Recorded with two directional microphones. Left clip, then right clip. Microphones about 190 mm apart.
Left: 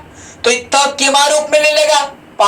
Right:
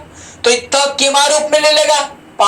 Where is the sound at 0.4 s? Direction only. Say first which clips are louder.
Even; 20° left (ahead or behind).